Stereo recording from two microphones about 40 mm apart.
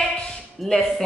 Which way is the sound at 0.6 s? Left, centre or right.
Centre.